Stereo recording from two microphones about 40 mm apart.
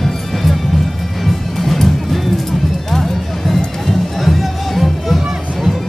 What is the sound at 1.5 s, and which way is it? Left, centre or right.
Music, centre.